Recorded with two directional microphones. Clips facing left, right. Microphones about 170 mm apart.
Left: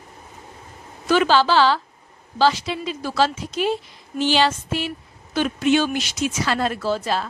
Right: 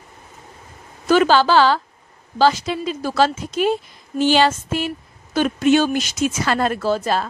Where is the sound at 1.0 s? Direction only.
45° right (ahead or behind).